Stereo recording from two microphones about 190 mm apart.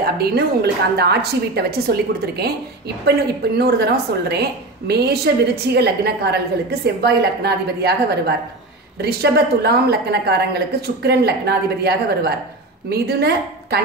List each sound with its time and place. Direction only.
0.0 s a woman's voice: 55° right (ahead or behind)